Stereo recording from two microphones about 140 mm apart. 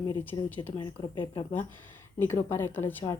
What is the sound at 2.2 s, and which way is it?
Speech, 15° left (ahead or behind).